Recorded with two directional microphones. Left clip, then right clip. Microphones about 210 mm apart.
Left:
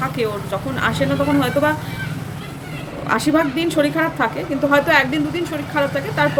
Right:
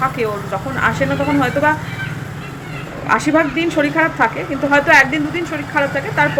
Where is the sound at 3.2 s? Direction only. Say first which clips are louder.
Right 2 dB; 20° left (ahead or behind).